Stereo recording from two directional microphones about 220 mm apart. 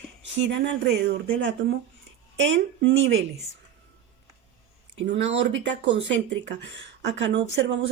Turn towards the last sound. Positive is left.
turn(degrees=-55)  # may be behind; listen again after turning